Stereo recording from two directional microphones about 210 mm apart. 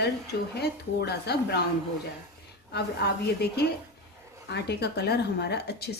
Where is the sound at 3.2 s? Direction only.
50° left (ahead or behind).